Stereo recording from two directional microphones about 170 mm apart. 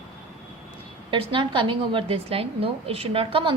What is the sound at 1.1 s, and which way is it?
A woman's voice, 30° right (ahead or behind).